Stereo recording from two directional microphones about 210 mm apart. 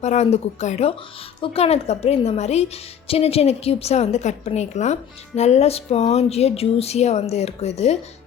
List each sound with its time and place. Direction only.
0.0 s a woman's voice: 30° left (ahead or behind)